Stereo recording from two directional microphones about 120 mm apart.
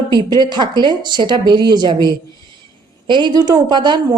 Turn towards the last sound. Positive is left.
turn(degrees=-35)  # may be behind; listen again after turning